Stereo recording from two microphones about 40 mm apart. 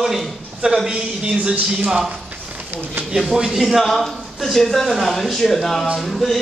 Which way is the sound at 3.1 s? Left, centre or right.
Centre.